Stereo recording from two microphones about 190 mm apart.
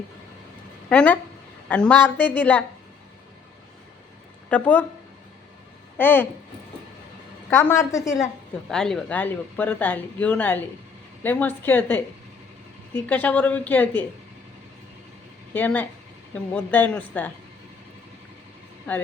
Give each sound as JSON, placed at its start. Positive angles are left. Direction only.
{"t": 0.9, "sound": "speech", "side_deg": 5}
{"t": 4.4, "sound": "speech", "side_deg": 10}
{"t": 6.0, "sound": "speech", "side_deg": 10}
{"t": 7.5, "sound": "speech", "side_deg": 15}
{"t": 8.7, "sound": "speech", "side_deg": 5}
{"t": 15.5, "sound": "speech", "side_deg": 10}